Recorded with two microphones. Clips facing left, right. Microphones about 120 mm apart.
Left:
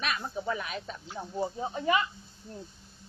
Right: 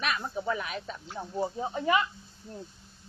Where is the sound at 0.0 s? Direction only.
30° right (ahead or behind).